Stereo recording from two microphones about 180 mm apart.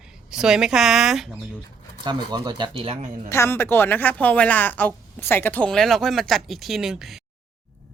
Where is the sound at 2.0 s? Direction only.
25° right (ahead or behind).